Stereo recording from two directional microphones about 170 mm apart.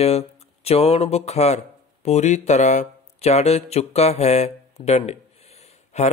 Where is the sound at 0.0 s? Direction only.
40° left (ahead or behind).